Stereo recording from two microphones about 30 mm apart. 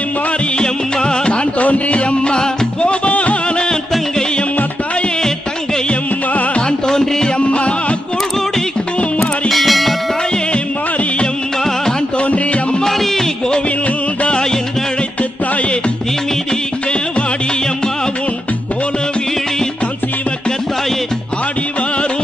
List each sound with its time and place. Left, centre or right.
0.6 s music: left
1.6 s music: left
2.0 s music: left
2.8 s music: left
6.9 s music: left
7.3 s music: left
9.2 s music: centre
12.8 s music: centre